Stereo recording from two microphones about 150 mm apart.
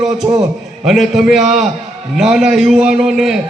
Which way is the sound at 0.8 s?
Centre (ahead or behind).